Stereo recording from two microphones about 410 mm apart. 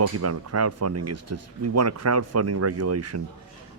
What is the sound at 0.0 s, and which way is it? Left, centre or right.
Speech, right.